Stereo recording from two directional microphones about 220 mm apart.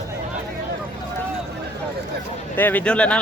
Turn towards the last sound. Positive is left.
turn(degrees=5)  # may be behind; listen again after turning